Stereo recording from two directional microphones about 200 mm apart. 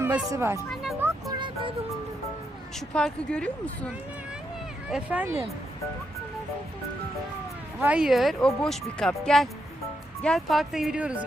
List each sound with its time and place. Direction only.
0.0 s speech: 10° right (ahead or behind)
0.7 s music: centre (ahead or behind)
1.3 s music: 25° right (ahead or behind)
2.7 s speech: 5° left (ahead or behind)
4.9 s speech: 5° right (ahead or behind)
7.8 s speech: 5° right (ahead or behind)